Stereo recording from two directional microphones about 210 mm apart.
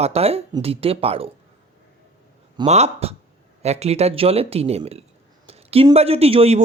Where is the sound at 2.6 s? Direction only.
30° right (ahead or behind).